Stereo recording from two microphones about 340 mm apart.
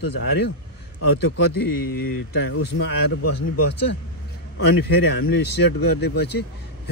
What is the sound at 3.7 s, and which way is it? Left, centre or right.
Speech, left.